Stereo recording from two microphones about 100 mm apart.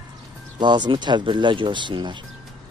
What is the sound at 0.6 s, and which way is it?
Speech, 50° right (ahead or behind).